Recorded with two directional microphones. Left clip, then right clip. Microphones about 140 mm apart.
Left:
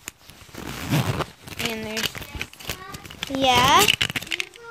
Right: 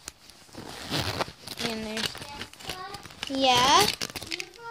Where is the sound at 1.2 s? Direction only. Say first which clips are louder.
Left 3 dB; 15° left (ahead or behind).